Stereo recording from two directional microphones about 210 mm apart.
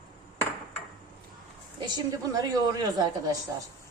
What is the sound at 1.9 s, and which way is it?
A woman's voice, 20° right (ahead or behind).